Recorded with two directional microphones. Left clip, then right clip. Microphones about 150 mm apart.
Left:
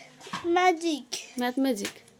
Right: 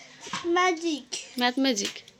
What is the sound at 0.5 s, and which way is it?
Speech, 15° left (ahead or behind).